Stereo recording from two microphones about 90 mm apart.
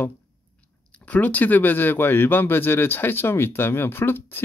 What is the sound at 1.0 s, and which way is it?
Speech, 15° left (ahead or behind).